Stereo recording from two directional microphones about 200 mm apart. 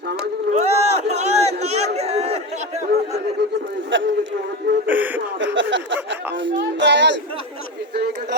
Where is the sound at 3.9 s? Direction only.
65° right (ahead or behind).